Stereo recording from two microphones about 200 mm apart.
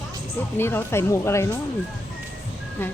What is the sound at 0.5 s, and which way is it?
Speech, 10° left (ahead or behind).